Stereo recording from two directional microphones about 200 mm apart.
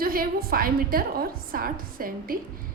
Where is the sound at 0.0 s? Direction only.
45° right (ahead or behind).